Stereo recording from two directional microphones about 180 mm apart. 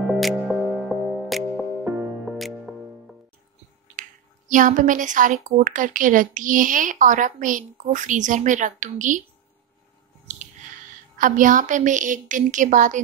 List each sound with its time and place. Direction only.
0.0 s music: 5° right (ahead or behind)
2.3 s music: centre (ahead or behind)
4.0 s finger snapping: 45° right (ahead or behind)
4.5 s a woman's voice: 45° right (ahead or behind)
11.1 s a woman's voice: 45° right (ahead or behind)